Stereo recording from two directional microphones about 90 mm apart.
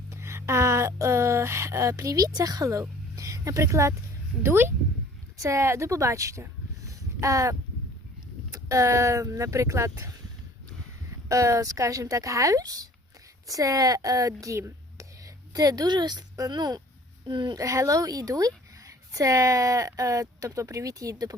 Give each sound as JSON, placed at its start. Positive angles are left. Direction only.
{"t": 0.1, "sound": "speech", "side_deg": -30}
{"t": 8.5, "sound": "speech", "side_deg": -40}
{"t": 11.3, "sound": "a child's voice", "side_deg": -35}
{"t": 17.6, "sound": "speech", "side_deg": -35}